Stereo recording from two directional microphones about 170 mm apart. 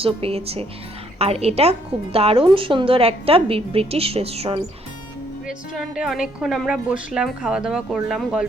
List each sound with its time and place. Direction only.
0.0 s a woman's voice: 35° right (ahead or behind)
5.7 s a woman's voice: 5° right (ahead or behind)